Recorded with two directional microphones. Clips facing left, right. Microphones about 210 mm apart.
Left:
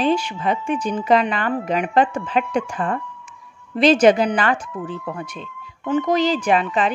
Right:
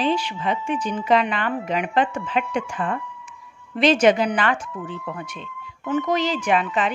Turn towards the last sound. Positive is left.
turn(degrees=35)  # may be behind; listen again after turning